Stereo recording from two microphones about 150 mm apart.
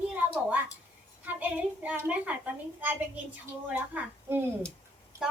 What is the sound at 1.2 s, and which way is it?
A woman's voice, 10° right (ahead or behind).